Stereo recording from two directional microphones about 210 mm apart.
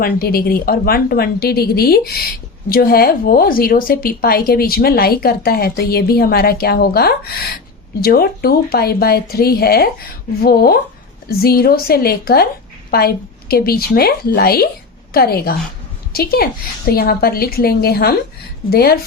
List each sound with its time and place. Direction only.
0.0 s a woman's voice: 45° left (ahead or behind)